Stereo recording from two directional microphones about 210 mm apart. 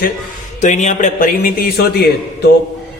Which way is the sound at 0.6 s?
35° left (ahead or behind).